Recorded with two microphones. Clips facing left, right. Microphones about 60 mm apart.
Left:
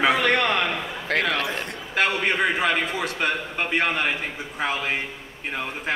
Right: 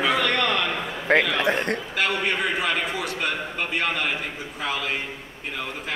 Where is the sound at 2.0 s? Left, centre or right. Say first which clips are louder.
Left 4 dB; left.